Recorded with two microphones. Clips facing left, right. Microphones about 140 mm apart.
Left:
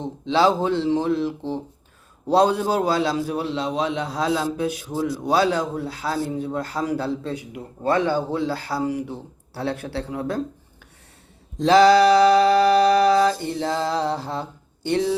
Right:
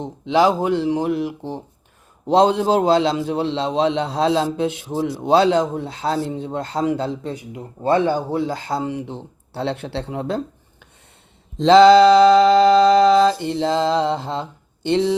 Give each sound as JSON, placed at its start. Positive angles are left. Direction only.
{"t": 0.0, "sound": "a man's voice", "side_deg": -15}
{"t": 11.6, "sound": "a man's voice", "side_deg": -25}